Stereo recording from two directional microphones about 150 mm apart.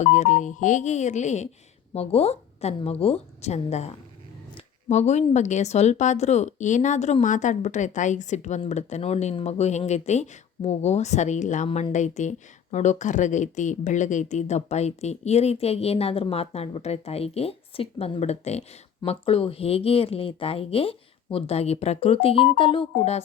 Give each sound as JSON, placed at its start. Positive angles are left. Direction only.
{"t": 0.0, "sound": "speech", "side_deg": 50}